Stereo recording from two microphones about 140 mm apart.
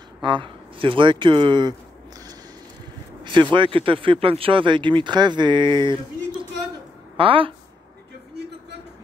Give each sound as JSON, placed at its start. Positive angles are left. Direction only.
{"t": 0.2, "sound": "speech", "side_deg": -35}
{"t": 3.5, "sound": "speech", "side_deg": -40}